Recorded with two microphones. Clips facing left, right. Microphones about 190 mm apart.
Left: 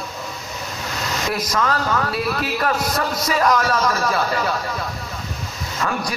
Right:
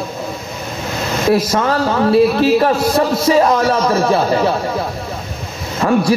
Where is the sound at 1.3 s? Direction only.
30° right (ahead or behind).